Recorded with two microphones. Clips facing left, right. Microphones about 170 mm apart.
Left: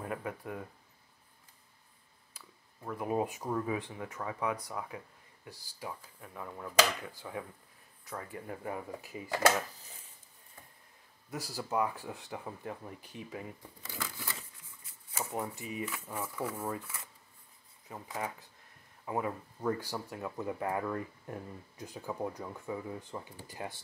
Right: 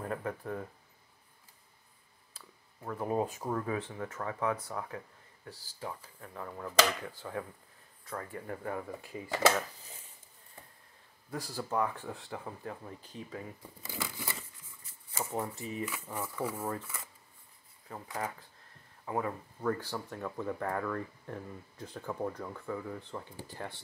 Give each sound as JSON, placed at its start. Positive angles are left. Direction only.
{"t": 0.0, "sound": "speech", "side_deg": 10}
{"t": 3.1, "sound": "speech", "side_deg": 10}
{"t": 11.2, "sound": "speech", "side_deg": 10}
{"t": 13.6, "sound": "speech", "side_deg": -5}
{"t": 15.1, "sound": "speech", "side_deg": 10}
{"t": 18.0, "sound": "speech", "side_deg": 15}